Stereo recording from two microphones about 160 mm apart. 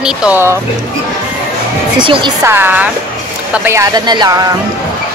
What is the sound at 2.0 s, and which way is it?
Speech, 30° right (ahead or behind).